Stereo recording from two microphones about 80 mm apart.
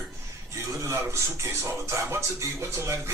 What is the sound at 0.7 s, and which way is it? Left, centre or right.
Speech, right.